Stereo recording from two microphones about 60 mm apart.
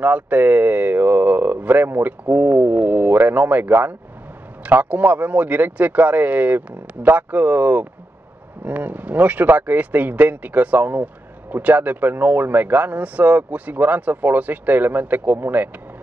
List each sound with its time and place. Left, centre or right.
0.0 s speech: right